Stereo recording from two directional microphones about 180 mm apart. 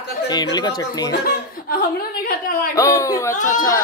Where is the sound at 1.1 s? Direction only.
60° left (ahead or behind).